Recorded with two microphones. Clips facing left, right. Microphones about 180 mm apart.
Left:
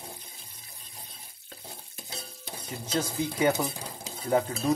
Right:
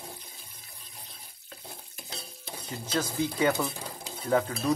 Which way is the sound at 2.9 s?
25° left (ahead or behind).